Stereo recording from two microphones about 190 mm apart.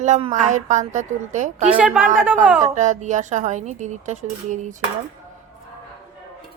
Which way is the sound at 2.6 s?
40° right (ahead or behind).